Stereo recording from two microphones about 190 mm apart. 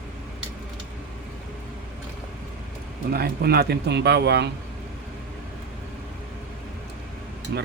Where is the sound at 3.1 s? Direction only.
55° right (ahead or behind).